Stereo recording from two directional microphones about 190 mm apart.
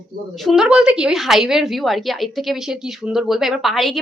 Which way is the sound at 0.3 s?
Centre (ahead or behind).